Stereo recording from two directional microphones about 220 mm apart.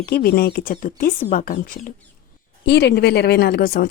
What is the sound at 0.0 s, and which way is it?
Speech, 45° left (ahead or behind).